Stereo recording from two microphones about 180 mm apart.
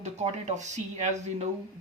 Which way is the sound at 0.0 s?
40° right (ahead or behind).